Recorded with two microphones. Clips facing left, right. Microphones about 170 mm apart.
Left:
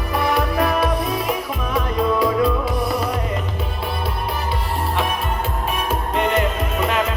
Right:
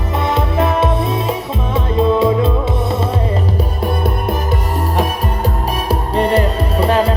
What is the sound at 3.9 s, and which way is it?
Music, 45° right (ahead or behind).